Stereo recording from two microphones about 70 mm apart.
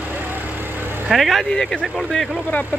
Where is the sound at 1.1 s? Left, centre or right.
Centre.